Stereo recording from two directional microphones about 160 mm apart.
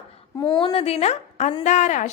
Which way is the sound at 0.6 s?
35° left (ahead or behind).